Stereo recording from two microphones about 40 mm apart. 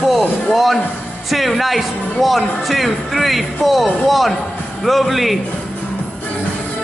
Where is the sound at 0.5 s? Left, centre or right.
Centre.